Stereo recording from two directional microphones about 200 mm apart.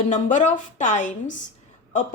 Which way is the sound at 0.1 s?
40° left (ahead or behind).